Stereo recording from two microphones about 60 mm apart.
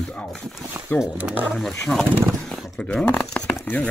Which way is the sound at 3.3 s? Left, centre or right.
Left.